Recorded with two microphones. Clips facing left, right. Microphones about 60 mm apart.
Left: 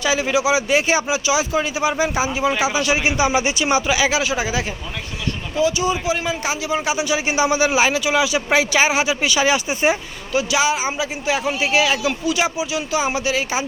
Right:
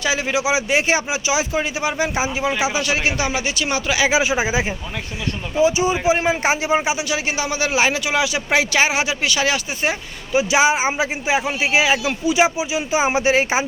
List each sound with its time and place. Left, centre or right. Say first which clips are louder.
0.0 s speech: left 2 dB; centre
4.2 s speech: right 2 dB; right
7.0 s speech: left 4 dB; centre
7.8 s speech: left 1 dB; centre
10.3 s speech: right 3 dB; right
11.3 s speech: left 1 dB; centre